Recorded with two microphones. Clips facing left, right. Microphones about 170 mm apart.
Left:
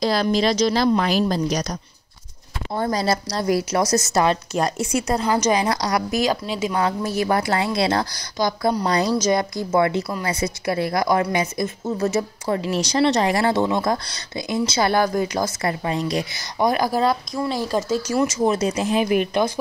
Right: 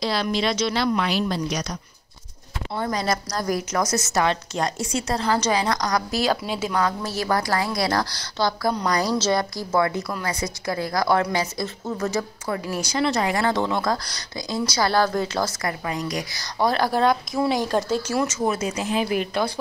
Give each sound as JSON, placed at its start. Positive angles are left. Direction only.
{"t": 0.0, "sound": "speech", "side_deg": 45}
{"t": 2.7, "sound": "speech", "side_deg": 35}
{"t": 4.5, "sound": "a woman's voice", "side_deg": 15}
{"t": 7.2, "sound": "a woman's voice", "side_deg": 25}
{"t": 15.6, "sound": "a woman's voice", "side_deg": 25}
{"t": 16.5, "sound": "speech", "side_deg": 15}
{"t": 18.8, "sound": "a woman's voice", "side_deg": 20}